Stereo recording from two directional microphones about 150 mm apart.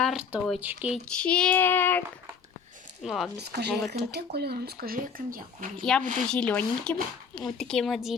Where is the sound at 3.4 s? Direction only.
90° right; by 5.7 s 70° right (ahead or behind).